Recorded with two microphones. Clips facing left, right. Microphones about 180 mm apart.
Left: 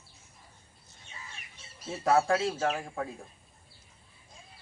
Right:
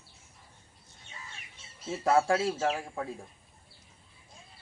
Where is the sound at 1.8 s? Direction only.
25° right (ahead or behind).